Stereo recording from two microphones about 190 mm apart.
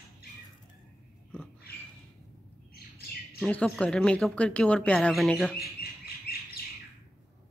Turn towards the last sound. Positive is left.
turn(degrees=55)  # may be behind; listen again after turning